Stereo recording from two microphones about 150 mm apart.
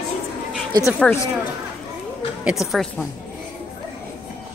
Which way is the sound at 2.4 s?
Centre (ahead or behind).